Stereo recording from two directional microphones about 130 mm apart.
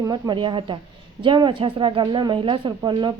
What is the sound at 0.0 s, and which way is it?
A woman's voice, 35° right (ahead or behind).